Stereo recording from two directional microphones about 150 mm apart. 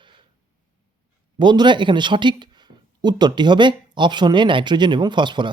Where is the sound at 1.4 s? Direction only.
30° right (ahead or behind).